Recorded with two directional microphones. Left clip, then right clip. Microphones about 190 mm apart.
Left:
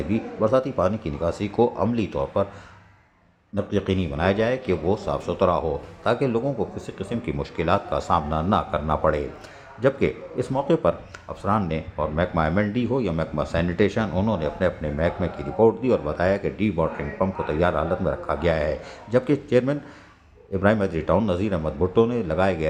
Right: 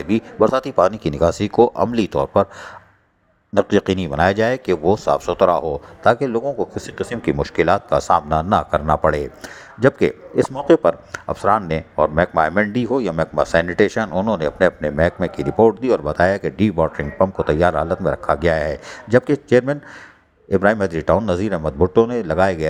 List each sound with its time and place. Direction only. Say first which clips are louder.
0.1 s speech: right 5 dB; 40° right (ahead or behind)
3.5 s speech: right 9 dB; 40° right (ahead or behind)